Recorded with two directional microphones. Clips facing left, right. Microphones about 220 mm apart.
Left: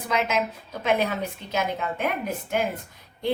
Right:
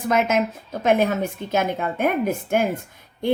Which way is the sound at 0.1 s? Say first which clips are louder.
Right 5 dB; 50° right (ahead or behind).